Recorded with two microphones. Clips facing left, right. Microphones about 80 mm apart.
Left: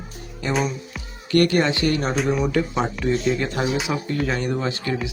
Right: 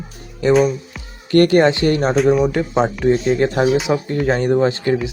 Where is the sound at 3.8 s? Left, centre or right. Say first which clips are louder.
Right 6 dB; right.